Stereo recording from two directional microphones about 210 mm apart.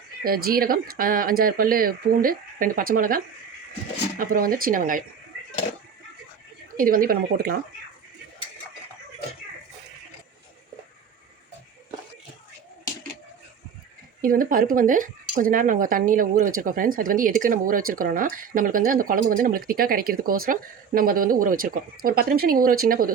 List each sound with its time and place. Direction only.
0.2 s speech: 45° right (ahead or behind)
4.2 s speech: 40° right (ahead or behind)
6.7 s speech: 45° right (ahead or behind)
14.2 s speech: 40° right (ahead or behind)